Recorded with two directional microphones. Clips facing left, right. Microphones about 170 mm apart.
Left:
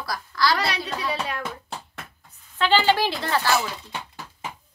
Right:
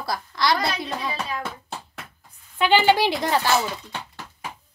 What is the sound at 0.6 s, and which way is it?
Speech, 75° left (ahead or behind).